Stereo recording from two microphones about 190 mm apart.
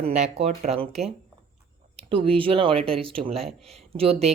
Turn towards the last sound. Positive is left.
turn(degrees=-30)  # may be behind; listen again after turning